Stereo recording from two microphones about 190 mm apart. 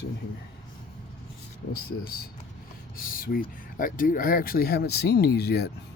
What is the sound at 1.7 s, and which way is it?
Speech, 55° left (ahead or behind).